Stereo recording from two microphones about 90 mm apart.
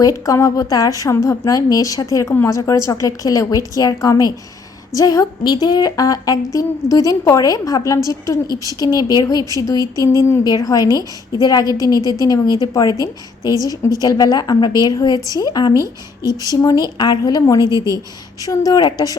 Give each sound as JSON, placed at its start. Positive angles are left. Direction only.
{"t": 0.0, "sound": "speech", "side_deg": 35}
{"t": 5.4, "sound": "a woman's voice", "side_deg": 50}
{"t": 13.5, "sound": "a woman's voice", "side_deg": -40}
{"t": 14.0, "sound": "a woman's voice", "side_deg": 45}
{"t": 16.2, "sound": "a woman's voice", "side_deg": -35}
{"t": 16.6, "sound": "a woman's voice", "side_deg": 45}
{"t": 17.6, "sound": "a woman's voice", "side_deg": -40}
{"t": 18.4, "sound": "a woman's voice", "side_deg": 45}